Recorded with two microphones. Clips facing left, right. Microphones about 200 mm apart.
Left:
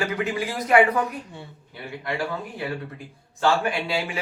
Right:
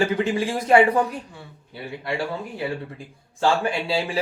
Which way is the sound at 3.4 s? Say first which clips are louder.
Right 1 dB; 30° right (ahead or behind).